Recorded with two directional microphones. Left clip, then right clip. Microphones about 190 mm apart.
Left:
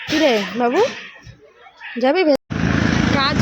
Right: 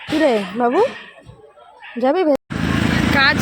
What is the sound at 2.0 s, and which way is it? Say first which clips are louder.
Speech: left 1 dB; centre (ahead or behind).